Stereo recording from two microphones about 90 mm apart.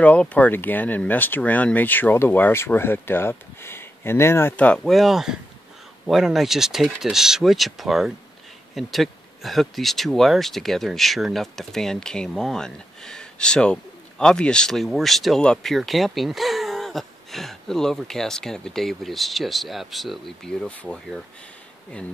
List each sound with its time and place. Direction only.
0.0 s speech: 15° left (ahead or behind)
4.6 s speech: 15° left (ahead or behind)
4.8 s speech: centre (ahead or behind)
20.7 s speech: 15° left (ahead or behind)